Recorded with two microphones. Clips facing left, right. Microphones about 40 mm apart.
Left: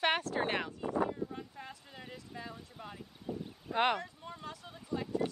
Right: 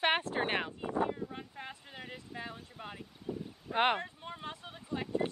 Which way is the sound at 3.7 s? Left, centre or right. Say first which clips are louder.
Right 1 dB; right.